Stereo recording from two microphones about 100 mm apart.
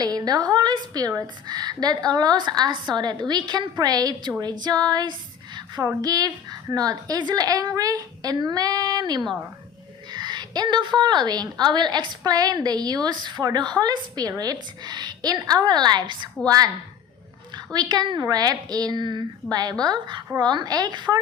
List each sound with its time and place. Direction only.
0.0 s a woman's voice: 40° right (ahead or behind)
17.7 s a woman's voice: 40° right (ahead or behind)